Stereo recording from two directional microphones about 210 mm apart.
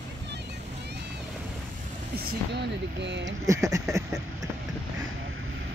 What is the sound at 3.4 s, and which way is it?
Speech, 15° right (ahead or behind).